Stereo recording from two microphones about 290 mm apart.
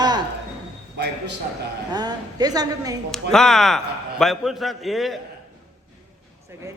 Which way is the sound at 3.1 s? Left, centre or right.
Centre.